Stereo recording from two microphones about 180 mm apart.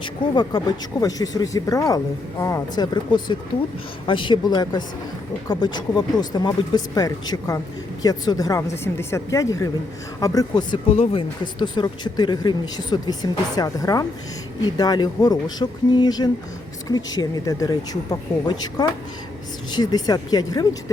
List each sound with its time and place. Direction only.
0.0 s a woman's voice: 25° left (ahead or behind)